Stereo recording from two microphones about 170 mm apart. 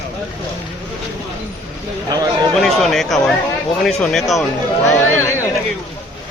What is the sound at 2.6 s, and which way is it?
Chatter, centre (ahead or behind).